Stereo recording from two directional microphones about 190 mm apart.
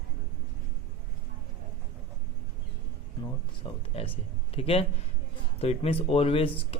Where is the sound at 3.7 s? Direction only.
25° left (ahead or behind).